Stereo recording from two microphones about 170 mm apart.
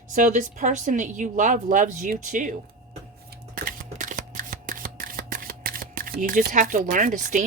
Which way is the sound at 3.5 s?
55° right (ahead or behind).